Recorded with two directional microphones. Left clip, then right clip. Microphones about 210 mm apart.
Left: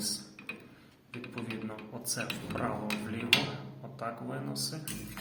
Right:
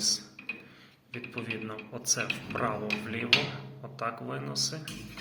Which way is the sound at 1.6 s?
10° right (ahead or behind).